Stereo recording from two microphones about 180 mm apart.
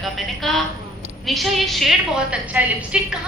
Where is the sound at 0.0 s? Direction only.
Centre (ahead or behind).